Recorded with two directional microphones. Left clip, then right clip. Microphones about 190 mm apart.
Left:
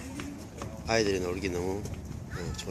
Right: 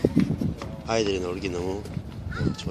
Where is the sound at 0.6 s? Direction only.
5° left (ahead or behind).